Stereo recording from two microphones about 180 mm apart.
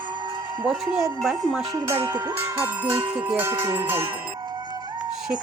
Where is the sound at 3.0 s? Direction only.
25° right (ahead or behind).